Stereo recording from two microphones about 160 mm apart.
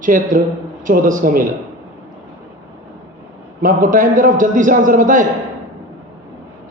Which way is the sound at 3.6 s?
60° right (ahead or behind).